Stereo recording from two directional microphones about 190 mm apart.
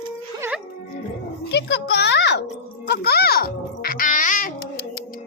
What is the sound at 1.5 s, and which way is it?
Music, 65° left (ahead or behind).